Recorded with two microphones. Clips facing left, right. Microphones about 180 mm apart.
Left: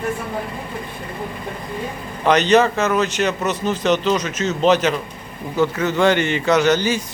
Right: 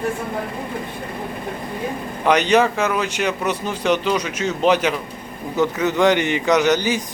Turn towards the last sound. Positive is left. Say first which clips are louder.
# left 1 dB
turn(degrees=-15)  # may be behind; listen again after turning